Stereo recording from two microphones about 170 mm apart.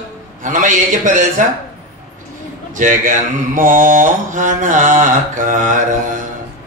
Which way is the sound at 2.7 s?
50° right (ahead or behind).